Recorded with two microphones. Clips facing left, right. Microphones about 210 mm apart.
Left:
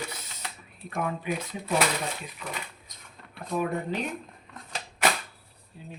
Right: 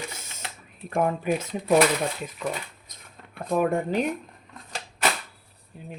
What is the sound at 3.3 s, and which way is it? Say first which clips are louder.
Speech: right 6 dB; 45° right (ahead or behind).